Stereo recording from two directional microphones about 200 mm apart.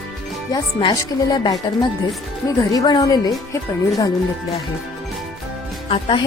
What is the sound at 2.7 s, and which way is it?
Speech, 20° left (ahead or behind).